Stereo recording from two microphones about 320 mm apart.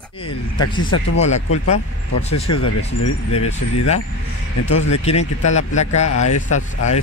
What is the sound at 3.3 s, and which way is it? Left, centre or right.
Speech, centre.